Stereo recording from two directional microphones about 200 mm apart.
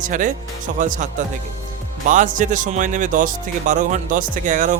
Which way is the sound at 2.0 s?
40° right (ahead or behind).